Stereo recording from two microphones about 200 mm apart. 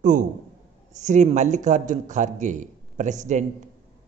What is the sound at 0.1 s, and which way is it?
A man's voice, 40° right (ahead or behind).